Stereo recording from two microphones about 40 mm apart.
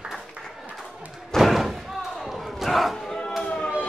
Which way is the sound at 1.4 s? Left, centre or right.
Centre.